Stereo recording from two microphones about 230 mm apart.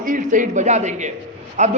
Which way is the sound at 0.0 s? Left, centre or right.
Right.